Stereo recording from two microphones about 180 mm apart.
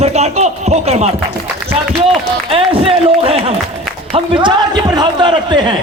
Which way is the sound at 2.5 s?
30° right (ahead or behind).